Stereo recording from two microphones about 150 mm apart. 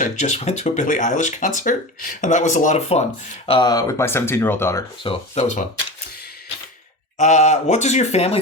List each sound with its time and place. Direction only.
0.0 s speech: 50° left (ahead or behind)
3.4 s speech: 35° left (ahead or behind); by 4.8 s 15° left (ahead or behind)
5.0 s speech: 45° left (ahead or behind)
7.2 s speech: 50° left (ahead or behind)